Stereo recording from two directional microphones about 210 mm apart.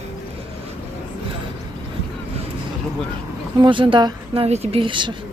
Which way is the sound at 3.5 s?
25° right (ahead or behind).